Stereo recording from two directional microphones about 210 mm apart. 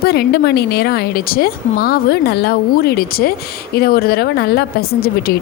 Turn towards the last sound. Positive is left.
turn(degrees=45)  # may be behind; listen again after turning